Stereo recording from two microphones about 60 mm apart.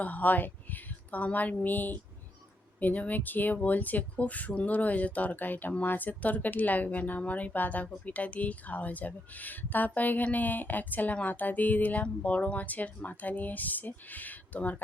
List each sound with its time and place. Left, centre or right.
0.0 s speech: left